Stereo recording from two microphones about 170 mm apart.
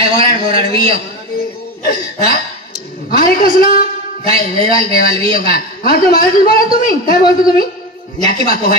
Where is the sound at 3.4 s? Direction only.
55° left (ahead or behind).